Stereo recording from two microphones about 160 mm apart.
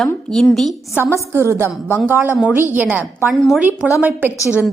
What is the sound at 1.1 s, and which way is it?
A woman's voice, 15° right (ahead or behind).